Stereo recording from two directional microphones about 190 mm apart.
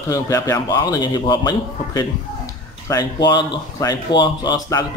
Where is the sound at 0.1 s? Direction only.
15° left (ahead or behind).